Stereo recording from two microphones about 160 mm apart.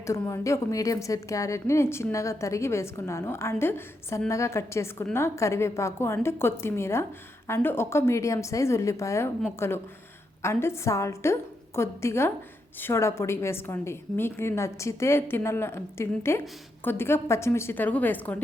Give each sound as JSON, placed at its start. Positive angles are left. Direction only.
{"t": 0.0, "sound": "a woman's voice", "side_deg": 20}